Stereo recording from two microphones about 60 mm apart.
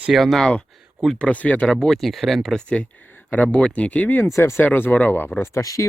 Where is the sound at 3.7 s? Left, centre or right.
Left.